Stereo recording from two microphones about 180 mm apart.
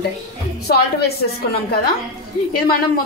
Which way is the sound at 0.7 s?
60° left (ahead or behind).